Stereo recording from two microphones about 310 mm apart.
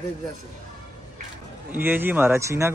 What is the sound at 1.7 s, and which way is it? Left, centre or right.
A man's voice, centre.